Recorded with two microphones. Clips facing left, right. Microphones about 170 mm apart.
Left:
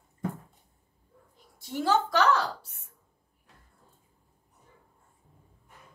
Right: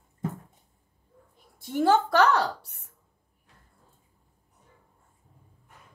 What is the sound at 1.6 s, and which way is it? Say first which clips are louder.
A woman's voice: right 4 dB; 55° right (ahead or behind).